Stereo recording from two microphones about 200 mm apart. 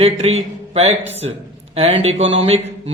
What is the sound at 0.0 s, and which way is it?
A man's voice, 30° right (ahead or behind).